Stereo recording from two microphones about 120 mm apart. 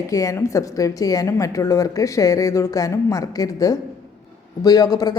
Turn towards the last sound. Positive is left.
turn(degrees=35)  # may be behind; listen again after turning